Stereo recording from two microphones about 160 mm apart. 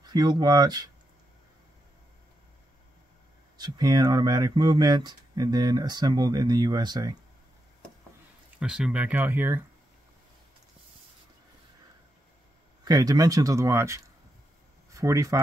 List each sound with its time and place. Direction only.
0.0 s speech: 25° right (ahead or behind)
3.5 s speech: 25° right (ahead or behind)
8.5 s speech: 5° right (ahead or behind)
12.8 s speech: 25° right (ahead or behind)